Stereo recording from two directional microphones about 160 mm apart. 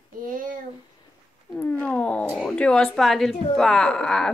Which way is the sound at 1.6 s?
5° left (ahead or behind).